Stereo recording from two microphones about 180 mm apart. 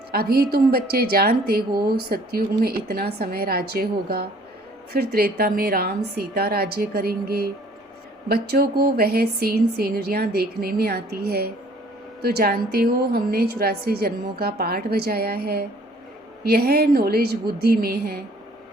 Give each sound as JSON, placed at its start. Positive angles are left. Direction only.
{"t": 0.1, "sound": "a woman's voice", "side_deg": -55}